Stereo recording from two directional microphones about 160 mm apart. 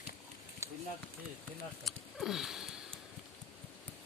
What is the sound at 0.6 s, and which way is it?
Run, 15° right (ahead or behind).